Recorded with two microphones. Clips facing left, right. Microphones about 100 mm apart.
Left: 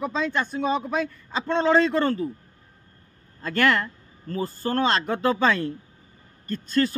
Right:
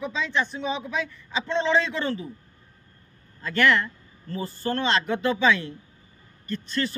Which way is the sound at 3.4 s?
45° left (ahead or behind).